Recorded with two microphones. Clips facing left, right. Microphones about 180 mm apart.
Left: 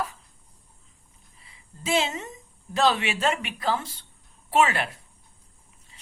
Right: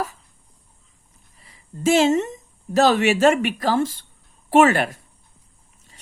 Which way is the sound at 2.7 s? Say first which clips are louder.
Right 6 dB; 45° right (ahead or behind).